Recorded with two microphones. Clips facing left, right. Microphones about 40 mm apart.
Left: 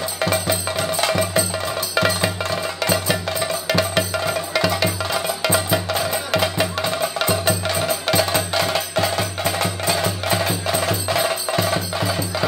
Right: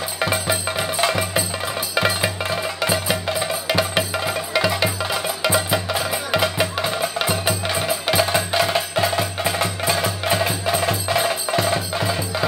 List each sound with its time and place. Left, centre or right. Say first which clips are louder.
0.2 s music: even; centre